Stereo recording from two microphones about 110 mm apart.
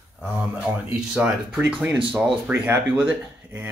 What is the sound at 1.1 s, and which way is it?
Speech, 5° right (ahead or behind).